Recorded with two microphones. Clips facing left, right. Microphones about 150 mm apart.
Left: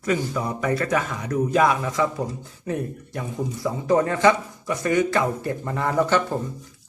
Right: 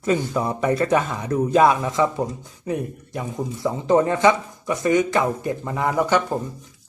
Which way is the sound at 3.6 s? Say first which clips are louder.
Right 3 dB; 25° right (ahead or behind).